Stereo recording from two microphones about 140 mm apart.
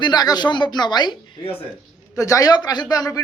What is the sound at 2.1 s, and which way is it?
A man's voice, 25° left (ahead or behind).